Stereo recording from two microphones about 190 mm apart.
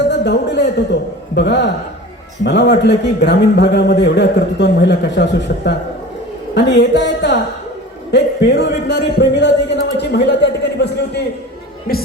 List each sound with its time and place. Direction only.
0.1 s a man's voice: 65° left (ahead or behind)
11.9 s speech: 50° left (ahead or behind)